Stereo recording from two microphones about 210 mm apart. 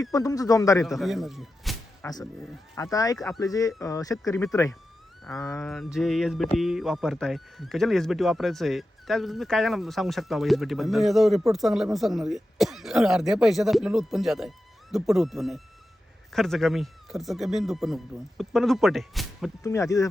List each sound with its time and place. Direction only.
0.0 s a man's voice: 15° left (ahead or behind)
0.9 s speech: centre (ahead or behind)
2.7 s a man's voice: 15° left (ahead or behind)
5.5 s speech: centre (ahead or behind)
19.6 s a man's voice: 15° left (ahead or behind)